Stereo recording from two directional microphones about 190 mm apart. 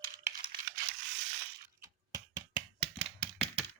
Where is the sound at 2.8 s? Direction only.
30° right (ahead or behind).